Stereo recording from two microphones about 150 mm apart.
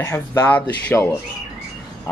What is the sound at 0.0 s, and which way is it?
Speech, 15° left (ahead or behind).